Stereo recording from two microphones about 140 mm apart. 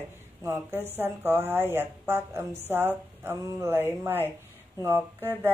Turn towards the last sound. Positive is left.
turn(degrees=-15)  # may be behind; listen again after turning